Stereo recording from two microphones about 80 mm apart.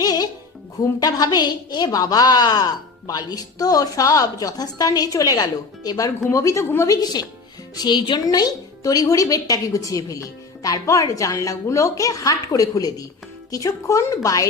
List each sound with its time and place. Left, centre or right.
0.0 s music: left
0.8 s a woman's voice: left
6.8 s speech: left
7.8 s speech: left
8.2 s a woman's voice: left